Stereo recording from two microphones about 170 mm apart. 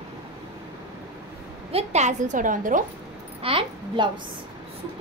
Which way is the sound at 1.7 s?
40° right (ahead or behind).